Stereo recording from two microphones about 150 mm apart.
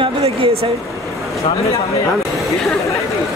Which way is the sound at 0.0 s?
40° right (ahead or behind).